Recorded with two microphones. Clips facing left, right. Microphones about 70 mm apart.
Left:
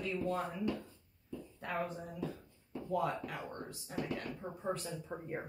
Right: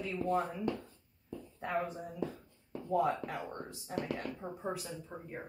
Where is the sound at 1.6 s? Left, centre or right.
Centre.